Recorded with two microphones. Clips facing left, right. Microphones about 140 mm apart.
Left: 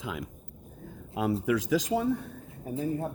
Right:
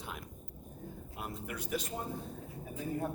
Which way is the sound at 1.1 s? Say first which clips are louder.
Left 16 dB; 90° left.